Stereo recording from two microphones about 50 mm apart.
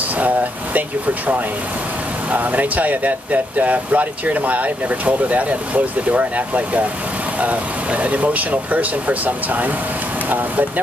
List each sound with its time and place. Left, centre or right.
0.2 s speech: right